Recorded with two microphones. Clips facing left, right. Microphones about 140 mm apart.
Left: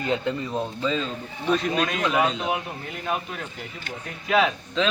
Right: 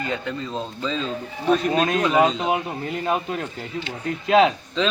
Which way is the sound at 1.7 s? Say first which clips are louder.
Right 4 dB; 35° right (ahead or behind).